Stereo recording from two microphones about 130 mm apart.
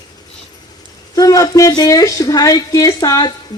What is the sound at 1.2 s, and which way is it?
A woman's voice, 25° left (ahead or behind).